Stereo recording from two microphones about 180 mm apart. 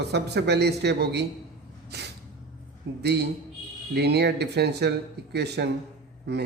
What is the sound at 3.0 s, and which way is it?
A man's voice, 70° right (ahead or behind).